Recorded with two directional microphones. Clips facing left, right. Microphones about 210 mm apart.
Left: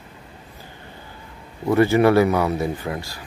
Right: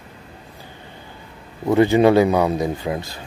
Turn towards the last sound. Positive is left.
turn(degrees=-20)  # may be behind; listen again after turning